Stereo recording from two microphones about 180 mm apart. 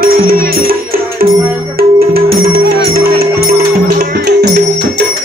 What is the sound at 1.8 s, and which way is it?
Music, 55° right (ahead or behind).